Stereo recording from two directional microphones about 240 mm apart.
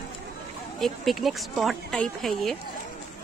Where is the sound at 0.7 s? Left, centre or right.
Centre.